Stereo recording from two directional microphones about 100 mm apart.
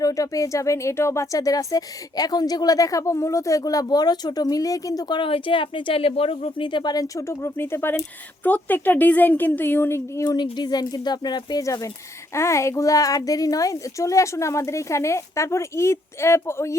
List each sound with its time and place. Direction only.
0.0 s a woman's voice: 35° left (ahead or behind)
10.2 s a woman's voice: 45° left (ahead or behind); by 16.7 s 25° left (ahead or behind)